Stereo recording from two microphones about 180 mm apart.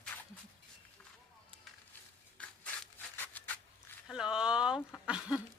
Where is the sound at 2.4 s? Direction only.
5° left (ahead or behind).